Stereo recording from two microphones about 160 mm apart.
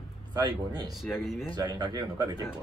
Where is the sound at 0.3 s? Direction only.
25° right (ahead or behind).